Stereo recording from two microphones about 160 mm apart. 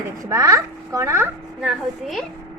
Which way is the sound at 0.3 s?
20° right (ahead or behind).